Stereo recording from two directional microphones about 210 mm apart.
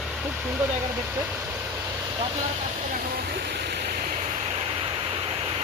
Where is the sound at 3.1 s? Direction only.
45° right (ahead or behind); by 5.5 s 25° right (ahead or behind).